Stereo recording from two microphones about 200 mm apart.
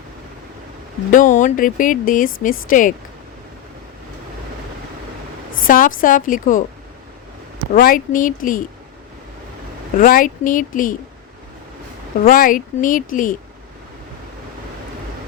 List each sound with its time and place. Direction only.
1.1 s speech: 40° left (ahead or behind)
5.6 s speech: 45° left (ahead or behind)
7.7 s speech: 45° left (ahead or behind)
10.0 s speech: 45° left (ahead or behind)
12.2 s speech: 45° left (ahead or behind)